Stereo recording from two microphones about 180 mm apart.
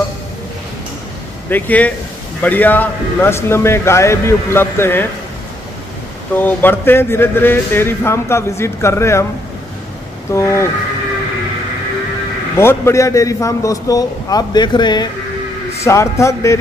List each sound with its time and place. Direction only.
1.5 s a man's voice: 10° left (ahead or behind)
6.3 s a man's voice: 10° left (ahead or behind)
10.3 s a man's voice: 15° left (ahead or behind)
12.5 s a man's voice: 15° left (ahead or behind)